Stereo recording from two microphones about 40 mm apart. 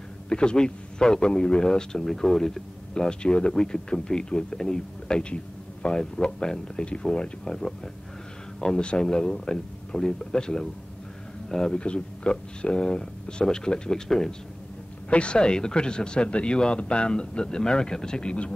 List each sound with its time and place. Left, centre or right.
0.3 s a man's voice: left
15.0 s a man's voice: left